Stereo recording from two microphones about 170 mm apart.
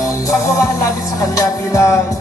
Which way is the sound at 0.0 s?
20° left (ahead or behind).